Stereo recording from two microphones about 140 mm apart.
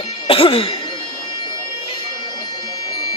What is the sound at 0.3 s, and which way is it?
Cough, 40° left (ahead or behind).